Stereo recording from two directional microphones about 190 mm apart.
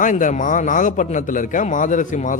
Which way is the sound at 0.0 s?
45° left (ahead or behind).